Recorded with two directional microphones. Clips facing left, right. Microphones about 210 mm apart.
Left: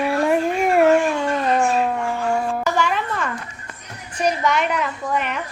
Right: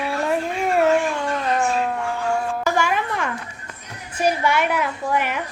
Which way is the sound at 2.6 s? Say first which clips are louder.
Even; 10° right (ahead or behind).